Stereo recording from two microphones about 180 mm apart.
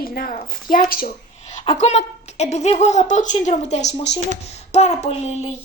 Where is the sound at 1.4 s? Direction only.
40° left (ahead or behind).